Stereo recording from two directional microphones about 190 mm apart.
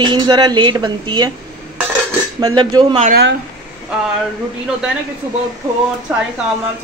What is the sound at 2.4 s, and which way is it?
Speech, 20° right (ahead or behind).